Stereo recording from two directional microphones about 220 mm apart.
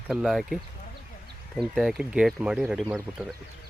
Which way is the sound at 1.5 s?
Centre (ahead or behind).